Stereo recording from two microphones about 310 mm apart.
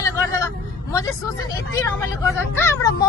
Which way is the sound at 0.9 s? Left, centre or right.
Centre.